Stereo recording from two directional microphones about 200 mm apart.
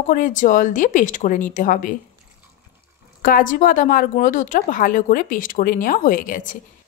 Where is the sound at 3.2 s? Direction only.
45° left (ahead or behind).